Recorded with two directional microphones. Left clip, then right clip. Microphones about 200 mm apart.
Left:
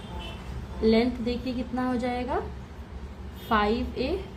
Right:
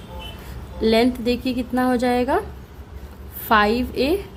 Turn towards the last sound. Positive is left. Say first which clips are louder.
# right 7 dB
turn(degrees=-50)  # may be behind; listen again after turning